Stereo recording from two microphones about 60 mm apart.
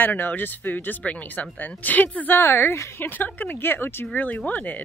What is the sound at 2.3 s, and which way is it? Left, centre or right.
Speech, left.